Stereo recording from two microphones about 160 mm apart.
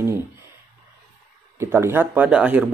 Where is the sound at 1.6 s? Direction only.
15° right (ahead or behind).